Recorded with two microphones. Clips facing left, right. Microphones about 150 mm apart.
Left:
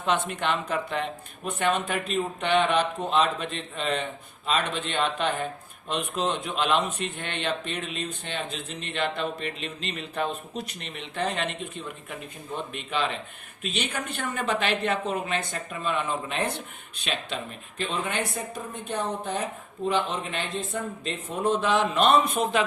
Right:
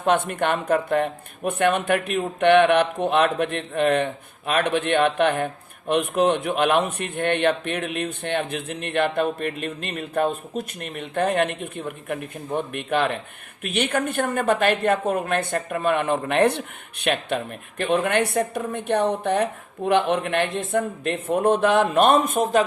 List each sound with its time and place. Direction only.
0.0 s speech: 55° right (ahead or behind)